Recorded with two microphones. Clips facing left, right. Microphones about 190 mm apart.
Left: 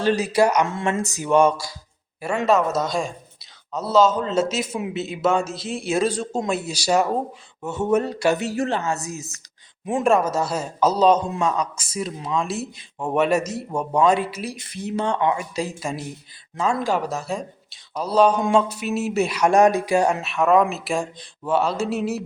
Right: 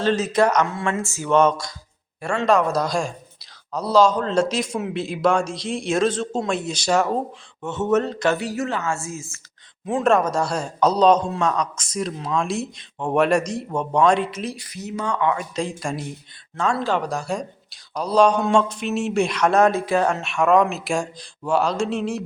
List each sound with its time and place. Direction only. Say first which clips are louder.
0.0 s speech: even; 10° left (ahead or behind)
8.4 s speech: left 1 dB; 30° left (ahead or behind); by 14.5 s 5° left (ahead or behind)
14.5 s speech: left 3 dB; 25° left (ahead or behind)
15.5 s speech: right 1 dB; 5° left (ahead or behind)
20.2 s speech: even; centre (ahead or behind)